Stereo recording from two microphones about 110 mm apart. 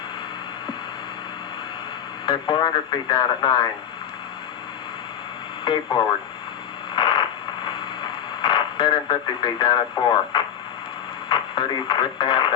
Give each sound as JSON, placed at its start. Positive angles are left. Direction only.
{"t": 2.2, "sound": "speech", "side_deg": 45}
{"t": 5.6, "sound": "speech", "side_deg": 45}
{"t": 6.9, "sound": "radio", "side_deg": 45}
{"t": 11.3, "sound": "speech", "side_deg": 45}